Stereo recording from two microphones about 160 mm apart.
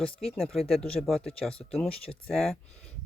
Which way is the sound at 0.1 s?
40° left (ahead or behind).